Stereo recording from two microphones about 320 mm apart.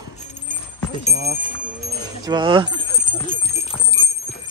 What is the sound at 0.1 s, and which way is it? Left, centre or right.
Horse, left.